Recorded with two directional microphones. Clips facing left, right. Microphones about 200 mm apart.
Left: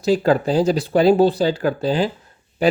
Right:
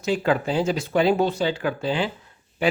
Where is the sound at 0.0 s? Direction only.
35° left (ahead or behind).